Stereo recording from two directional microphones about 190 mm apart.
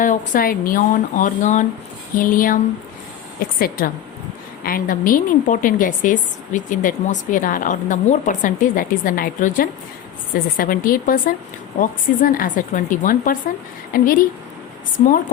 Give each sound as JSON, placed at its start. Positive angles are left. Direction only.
{"t": 0.0, "sound": "a woman's voice", "side_deg": 45}
{"t": 3.6, "sound": "a woman's voice", "side_deg": 50}